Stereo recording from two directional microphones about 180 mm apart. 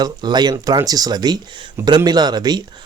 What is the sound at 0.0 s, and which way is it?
Speech, 25° right (ahead or behind).